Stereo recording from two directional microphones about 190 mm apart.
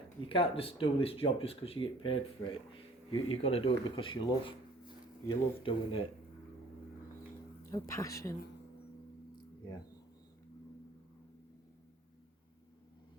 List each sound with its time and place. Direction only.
0.2 s speech: 30° left (ahead or behind)
7.7 s speech: 15° left (ahead or behind)